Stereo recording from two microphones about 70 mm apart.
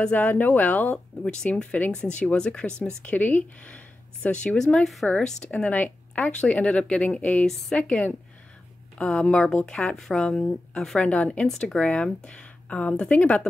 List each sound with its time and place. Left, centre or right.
0.0 s speech: left
0.9 s speech: centre